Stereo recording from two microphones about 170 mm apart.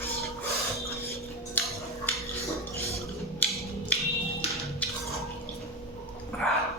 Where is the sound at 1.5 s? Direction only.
10° left (ahead or behind).